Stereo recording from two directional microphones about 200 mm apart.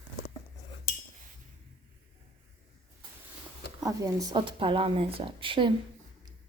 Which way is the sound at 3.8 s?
15° right (ahead or behind).